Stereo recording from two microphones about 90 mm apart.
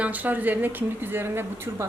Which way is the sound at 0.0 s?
20° right (ahead or behind).